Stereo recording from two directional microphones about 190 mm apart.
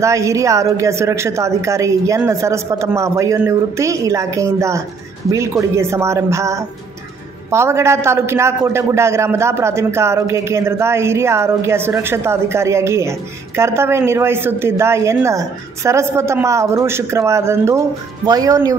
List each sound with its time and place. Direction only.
0.0 s a man's voice: 15° right (ahead or behind)